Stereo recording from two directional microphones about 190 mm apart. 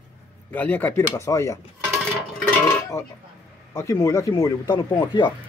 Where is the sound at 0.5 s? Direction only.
10° left (ahead or behind).